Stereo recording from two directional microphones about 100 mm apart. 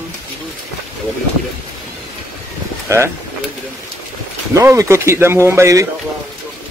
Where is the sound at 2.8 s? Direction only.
30° right (ahead or behind).